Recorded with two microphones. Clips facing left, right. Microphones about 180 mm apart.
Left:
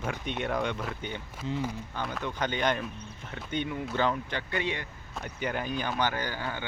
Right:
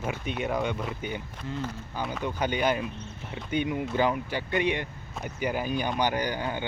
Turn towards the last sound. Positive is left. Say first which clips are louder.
# right 5 dB
turn(degrees=-15)  # may be behind; listen again after turning